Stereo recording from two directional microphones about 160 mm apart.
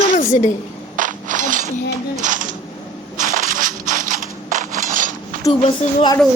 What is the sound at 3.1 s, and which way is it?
Crushing, 50° right (ahead or behind).